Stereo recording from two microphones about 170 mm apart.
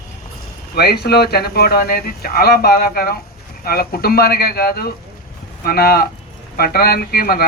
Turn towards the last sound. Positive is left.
turn(degrees=65)  # may be behind; listen again after turning